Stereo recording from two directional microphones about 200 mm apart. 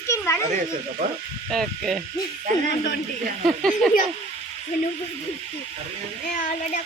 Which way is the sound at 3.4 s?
Centre (ahead or behind).